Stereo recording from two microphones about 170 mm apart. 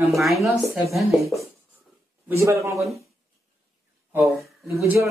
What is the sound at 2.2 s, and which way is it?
Speech, 15° right (ahead or behind).